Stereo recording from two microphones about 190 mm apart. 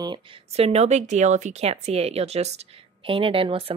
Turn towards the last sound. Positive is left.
turn(degrees=-30)  # may be behind; listen again after turning